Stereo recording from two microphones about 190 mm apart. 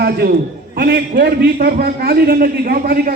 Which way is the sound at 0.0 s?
55° right (ahead or behind).